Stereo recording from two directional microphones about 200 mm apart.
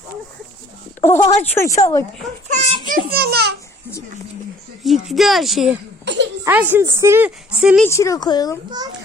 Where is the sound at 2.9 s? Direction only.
50° right (ahead or behind).